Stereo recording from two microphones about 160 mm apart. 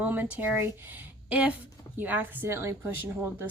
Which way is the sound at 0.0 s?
10° right (ahead or behind).